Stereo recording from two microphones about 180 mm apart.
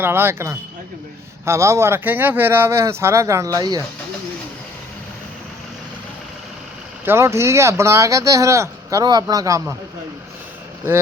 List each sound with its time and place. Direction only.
0.0 s speech: 15° right (ahead or behind)
7.0 s speech: 15° right (ahead or behind)